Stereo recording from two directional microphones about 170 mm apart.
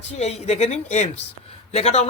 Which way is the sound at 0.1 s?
40° left (ahead or behind).